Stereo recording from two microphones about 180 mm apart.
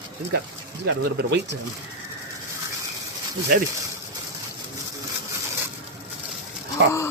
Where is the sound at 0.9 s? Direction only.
75° right (ahead or behind).